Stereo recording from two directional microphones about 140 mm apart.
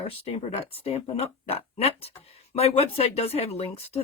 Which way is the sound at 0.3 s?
45° left (ahead or behind).